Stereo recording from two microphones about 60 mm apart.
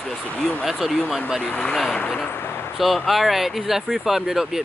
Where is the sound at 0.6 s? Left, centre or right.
Centre.